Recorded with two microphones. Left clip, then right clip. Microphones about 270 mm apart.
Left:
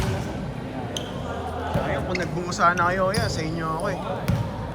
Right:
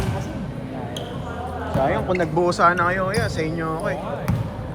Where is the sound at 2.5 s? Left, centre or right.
Centre.